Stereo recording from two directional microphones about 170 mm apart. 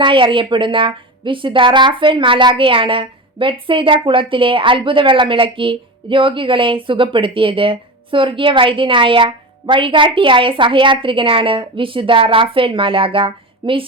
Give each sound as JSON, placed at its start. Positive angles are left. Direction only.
{"t": 0.0, "sound": "a woman's voice", "side_deg": -30}